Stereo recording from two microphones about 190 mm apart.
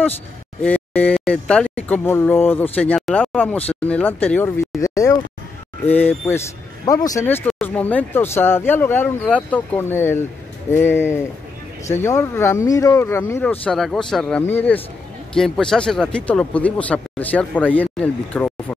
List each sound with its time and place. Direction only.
0.6 s speech: 5° left (ahead or behind)